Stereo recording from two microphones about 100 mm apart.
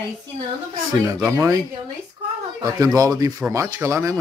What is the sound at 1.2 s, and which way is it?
Speech, 30° right (ahead or behind).